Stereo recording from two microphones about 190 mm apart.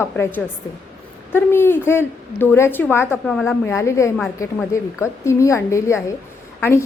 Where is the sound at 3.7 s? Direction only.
15° left (ahead or behind).